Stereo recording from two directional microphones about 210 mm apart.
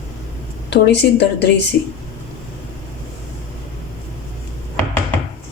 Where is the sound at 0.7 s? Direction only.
55° left (ahead or behind).